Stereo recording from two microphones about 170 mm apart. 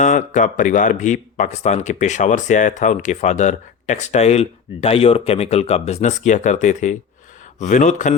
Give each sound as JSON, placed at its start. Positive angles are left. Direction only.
{"t": 0.0, "sound": "speech", "side_deg": 45}